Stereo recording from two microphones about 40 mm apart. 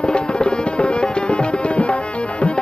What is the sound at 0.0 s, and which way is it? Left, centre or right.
Music, left.